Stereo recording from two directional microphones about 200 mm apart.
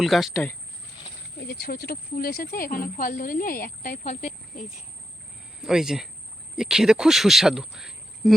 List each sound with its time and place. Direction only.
0.0 s speech: centre (ahead or behind)
1.5 s speech: 50° left (ahead or behind); by 4.3 s 35° left (ahead or behind)
5.6 s speech: 5° right (ahead or behind)